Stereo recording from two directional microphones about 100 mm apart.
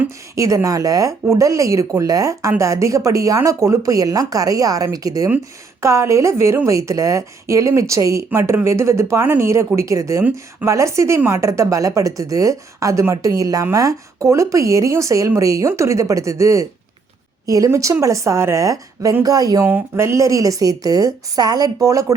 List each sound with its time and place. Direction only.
0.3 s speech: 35° right (ahead or behind)
19.6 s speech: 25° right (ahead or behind)